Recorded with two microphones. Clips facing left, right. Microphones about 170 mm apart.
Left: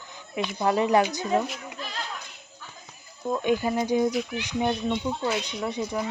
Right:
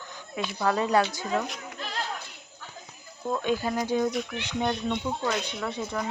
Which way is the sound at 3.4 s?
15° left (ahead or behind).